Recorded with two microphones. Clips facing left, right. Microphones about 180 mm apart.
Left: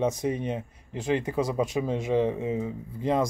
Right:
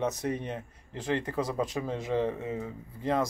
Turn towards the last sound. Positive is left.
turn(degrees=15)  # may be behind; listen again after turning